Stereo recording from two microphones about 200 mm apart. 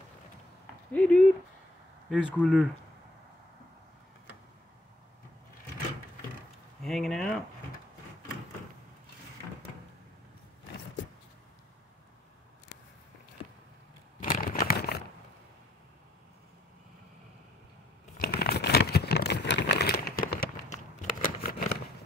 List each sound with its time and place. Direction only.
0.9 s speech: 5° left (ahead or behind)
2.0 s speech: 5° right (ahead or behind)
6.8 s speech: centre (ahead or behind)
14.2 s crumpling: 45° left (ahead or behind)
18.2 s crumpling: 50° left (ahead or behind)